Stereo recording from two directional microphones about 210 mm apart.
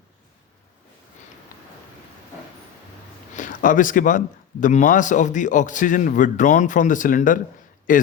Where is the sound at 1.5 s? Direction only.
40° left (ahead or behind).